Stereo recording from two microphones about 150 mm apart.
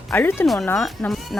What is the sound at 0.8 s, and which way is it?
Speech, centre (ahead or behind).